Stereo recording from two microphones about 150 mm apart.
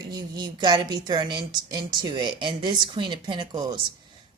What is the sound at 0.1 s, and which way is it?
A woman's voice, 25° right (ahead or behind).